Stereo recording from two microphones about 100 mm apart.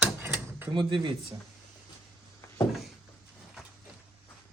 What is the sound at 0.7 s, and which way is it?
Speech, 55° right (ahead or behind).